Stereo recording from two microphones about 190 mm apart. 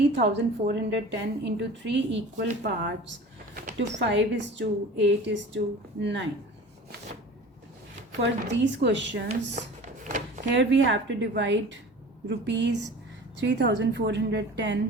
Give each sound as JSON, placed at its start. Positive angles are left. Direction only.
{"t": 0.2, "sound": "a woman's voice", "side_deg": -70}
{"t": 2.5, "sound": "speech", "side_deg": -55}
{"t": 3.9, "sound": "a woman's voice", "side_deg": -70}
{"t": 8.2, "sound": "speech", "side_deg": -70}
{"t": 9.6, "sound": "a sound", "side_deg": -40}
{"t": 10.5, "sound": "a woman's voice", "side_deg": -70}